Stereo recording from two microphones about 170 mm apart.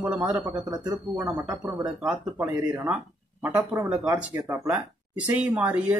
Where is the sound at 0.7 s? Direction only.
20° right (ahead or behind).